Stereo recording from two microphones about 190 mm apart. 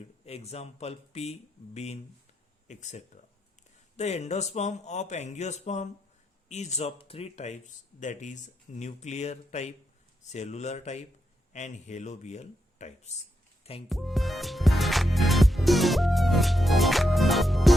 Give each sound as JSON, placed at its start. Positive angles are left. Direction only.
{"t": 0.3, "sound": "speech", "side_deg": 30}
{"t": 13.8, "sound": "music", "side_deg": 0}